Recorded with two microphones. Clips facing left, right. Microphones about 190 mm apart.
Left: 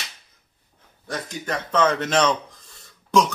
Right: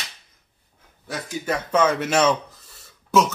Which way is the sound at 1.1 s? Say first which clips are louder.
Right 2 dB; 10° right (ahead or behind).